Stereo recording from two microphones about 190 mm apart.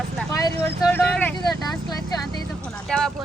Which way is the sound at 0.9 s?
5° left (ahead or behind).